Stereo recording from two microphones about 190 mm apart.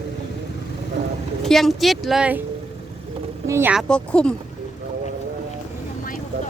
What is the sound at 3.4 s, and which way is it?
Speech, 10° right (ahead or behind).